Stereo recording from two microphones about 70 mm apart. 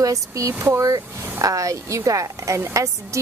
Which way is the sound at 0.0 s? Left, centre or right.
Right.